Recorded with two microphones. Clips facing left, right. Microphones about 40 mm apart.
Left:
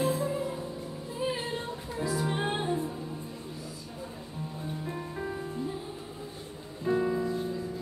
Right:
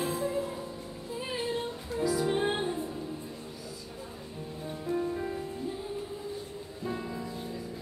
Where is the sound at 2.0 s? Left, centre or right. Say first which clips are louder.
Right 2 dB; left.